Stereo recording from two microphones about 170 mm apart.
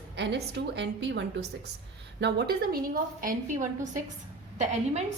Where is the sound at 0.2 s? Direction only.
80° right.